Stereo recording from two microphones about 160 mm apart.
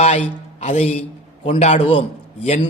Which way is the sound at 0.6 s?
40° left (ahead or behind).